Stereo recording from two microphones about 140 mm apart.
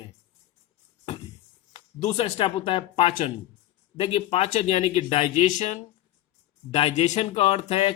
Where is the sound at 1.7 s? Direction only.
50° left (ahead or behind).